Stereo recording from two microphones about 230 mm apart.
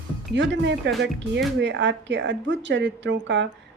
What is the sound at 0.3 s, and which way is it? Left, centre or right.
A woman's voice, right.